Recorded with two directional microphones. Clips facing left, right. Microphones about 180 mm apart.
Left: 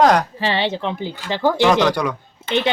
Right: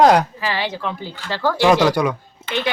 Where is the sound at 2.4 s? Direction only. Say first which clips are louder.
Left 3 dB; 25° left (ahead or behind).